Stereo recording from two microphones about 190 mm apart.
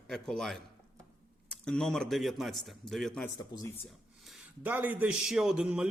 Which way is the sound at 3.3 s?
20° left (ahead or behind).